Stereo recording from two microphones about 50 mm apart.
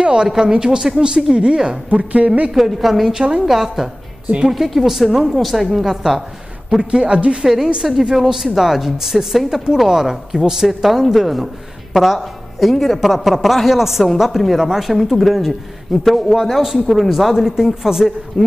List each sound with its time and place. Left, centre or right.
0.0 s a woman's voice: centre
2.5 s a man's voice: centre
6.8 s a woman's voice: centre
7.4 s a woman's voice: centre